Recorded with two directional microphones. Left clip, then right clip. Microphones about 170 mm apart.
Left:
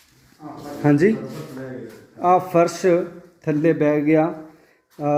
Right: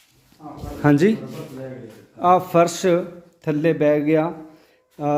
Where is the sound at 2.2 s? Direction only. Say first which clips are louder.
Right 1 dB; 20° right (ahead or behind).